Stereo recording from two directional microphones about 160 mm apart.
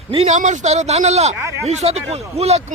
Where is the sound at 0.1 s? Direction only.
40° right (ahead or behind).